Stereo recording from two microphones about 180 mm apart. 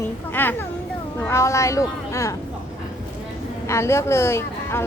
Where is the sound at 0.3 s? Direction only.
10° left (ahead or behind).